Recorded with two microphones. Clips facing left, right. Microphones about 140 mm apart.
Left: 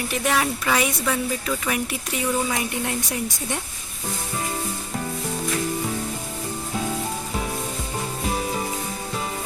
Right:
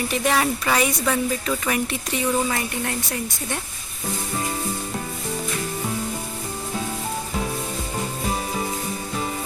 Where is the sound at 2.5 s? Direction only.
15° left (ahead or behind).